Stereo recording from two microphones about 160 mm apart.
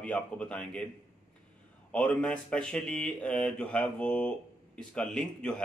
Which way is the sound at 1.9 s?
5° left (ahead or behind).